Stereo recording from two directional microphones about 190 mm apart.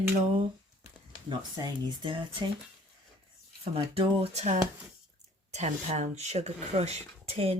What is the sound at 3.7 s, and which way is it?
Speech, 30° right (ahead or behind).